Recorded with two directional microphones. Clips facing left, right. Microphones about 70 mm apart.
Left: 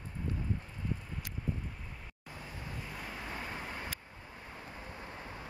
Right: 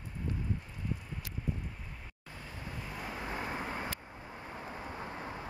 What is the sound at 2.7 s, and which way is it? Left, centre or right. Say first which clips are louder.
Vehicle: right 3 dB; centre.